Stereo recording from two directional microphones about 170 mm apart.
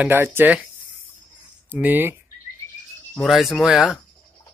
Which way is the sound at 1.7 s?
10° right (ahead or behind).